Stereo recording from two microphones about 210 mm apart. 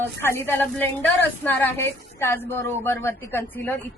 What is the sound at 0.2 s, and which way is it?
A woman's voice, 10° left (ahead or behind).